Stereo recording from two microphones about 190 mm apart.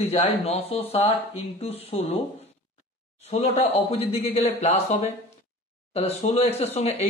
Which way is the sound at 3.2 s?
35° left (ahead or behind).